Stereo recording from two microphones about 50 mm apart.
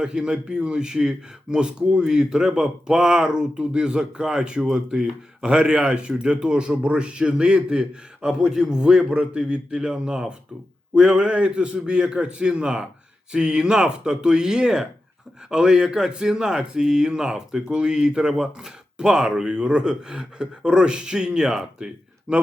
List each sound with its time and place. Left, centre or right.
0.0 s a man's voice: centre